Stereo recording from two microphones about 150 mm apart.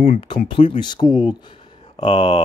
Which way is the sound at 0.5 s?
35° left (ahead or behind).